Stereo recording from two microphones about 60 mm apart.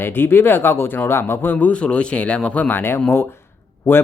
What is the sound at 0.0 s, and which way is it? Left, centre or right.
Speech, left.